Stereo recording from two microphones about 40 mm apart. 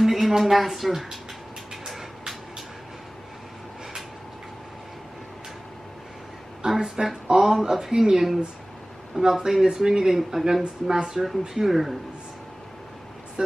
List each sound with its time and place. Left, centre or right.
0.0 s a sound: centre
0.4 s speech: centre
6.6 s speech: centre
10.6 s speech: right
11.1 s speech: centre